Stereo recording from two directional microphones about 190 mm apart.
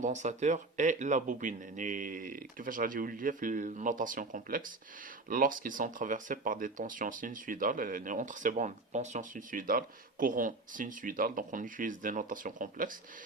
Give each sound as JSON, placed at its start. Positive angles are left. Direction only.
{"t": 0.0, "sound": "speech", "side_deg": -40}